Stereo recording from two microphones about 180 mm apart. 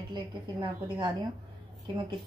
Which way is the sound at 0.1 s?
25° right (ahead or behind).